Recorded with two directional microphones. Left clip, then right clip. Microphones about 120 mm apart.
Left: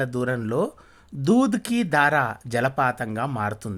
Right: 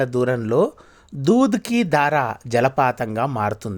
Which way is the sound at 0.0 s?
30° right (ahead or behind).